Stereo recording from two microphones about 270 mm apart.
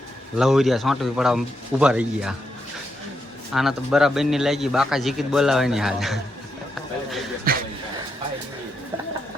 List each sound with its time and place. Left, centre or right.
0.3 s a man's voice: centre
3.5 s a man's voice: centre
7.5 s a sound: right